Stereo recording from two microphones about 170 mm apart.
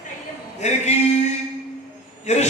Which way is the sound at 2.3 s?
45° left (ahead or behind).